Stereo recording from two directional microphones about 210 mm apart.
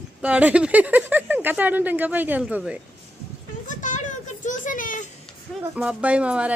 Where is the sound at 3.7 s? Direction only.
35° left (ahead or behind).